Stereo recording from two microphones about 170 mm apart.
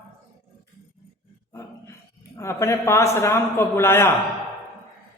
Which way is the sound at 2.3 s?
15° left (ahead or behind).